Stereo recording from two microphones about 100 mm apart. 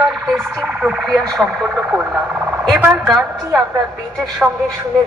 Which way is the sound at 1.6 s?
15° right (ahead or behind).